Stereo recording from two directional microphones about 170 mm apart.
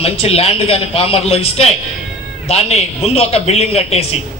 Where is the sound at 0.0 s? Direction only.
35° left (ahead or behind).